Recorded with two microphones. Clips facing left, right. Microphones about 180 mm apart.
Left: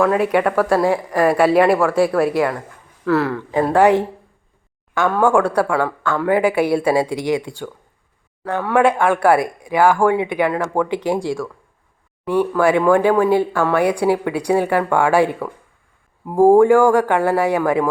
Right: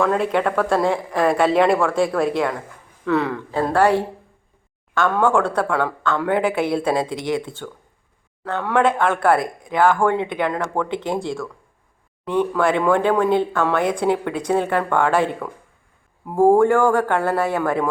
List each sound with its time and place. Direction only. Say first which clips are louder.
0.0 s speech: left 3 dB; 10° left (ahead or behind)
3.5 s speech: left 4 dB; 15° left (ahead or behind)